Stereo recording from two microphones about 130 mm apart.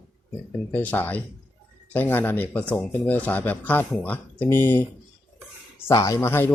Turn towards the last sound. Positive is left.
turn(degrees=20)  # may be behind; listen again after turning